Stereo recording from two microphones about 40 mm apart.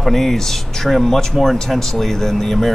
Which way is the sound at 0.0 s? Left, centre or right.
Centre.